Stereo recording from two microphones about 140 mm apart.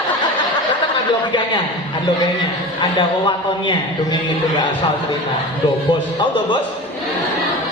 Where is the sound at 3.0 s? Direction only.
35° left (ahead or behind).